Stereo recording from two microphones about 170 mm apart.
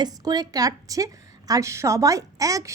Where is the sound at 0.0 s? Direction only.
25° right (ahead or behind).